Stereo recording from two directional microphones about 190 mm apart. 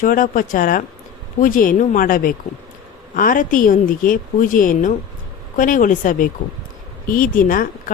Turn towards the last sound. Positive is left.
turn(degrees=45)  # may be behind; listen again after turning